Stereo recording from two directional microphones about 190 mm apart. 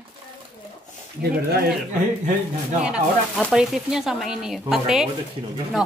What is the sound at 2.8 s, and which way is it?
Speech, 5° right (ahead or behind).